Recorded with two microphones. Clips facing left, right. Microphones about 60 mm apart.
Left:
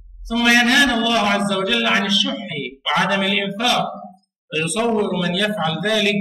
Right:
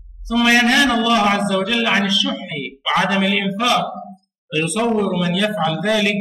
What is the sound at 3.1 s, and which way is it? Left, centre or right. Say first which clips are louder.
Speech: right 1 dB; centre.